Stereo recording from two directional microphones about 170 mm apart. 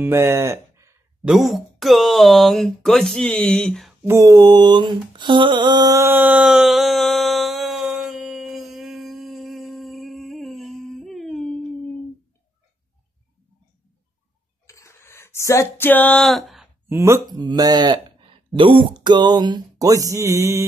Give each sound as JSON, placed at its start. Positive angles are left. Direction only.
{"t": 0.0, "sound": "speech", "side_deg": -15}
{"t": 1.2, "sound": "speech", "side_deg": 0}
{"t": 4.1, "sound": "mantra", "side_deg": -20}
{"t": 14.7, "sound": "a sound", "side_deg": 15}
{"t": 16.9, "sound": "speech", "side_deg": -15}